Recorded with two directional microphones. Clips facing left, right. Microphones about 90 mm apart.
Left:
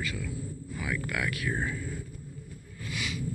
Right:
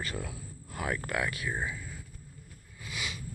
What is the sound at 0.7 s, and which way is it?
Speech, 45° right (ahead or behind).